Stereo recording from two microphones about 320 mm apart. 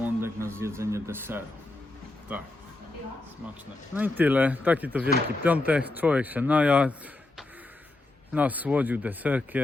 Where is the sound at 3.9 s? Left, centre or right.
Centre.